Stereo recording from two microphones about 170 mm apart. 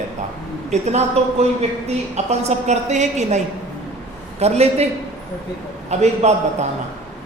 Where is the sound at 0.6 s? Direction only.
40° right (ahead or behind).